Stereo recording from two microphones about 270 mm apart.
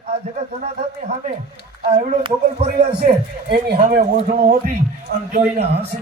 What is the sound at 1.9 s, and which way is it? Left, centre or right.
Speech, right.